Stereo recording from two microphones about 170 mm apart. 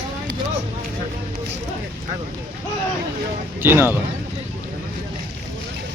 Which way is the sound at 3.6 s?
10° right (ahead or behind).